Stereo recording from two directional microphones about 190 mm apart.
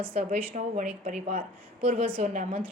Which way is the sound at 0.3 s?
40° right (ahead or behind).